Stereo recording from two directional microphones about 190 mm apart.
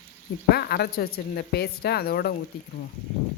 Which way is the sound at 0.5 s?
55° left (ahead or behind).